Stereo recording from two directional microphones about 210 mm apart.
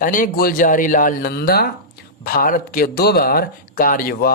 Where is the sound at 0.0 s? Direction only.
40° left (ahead or behind).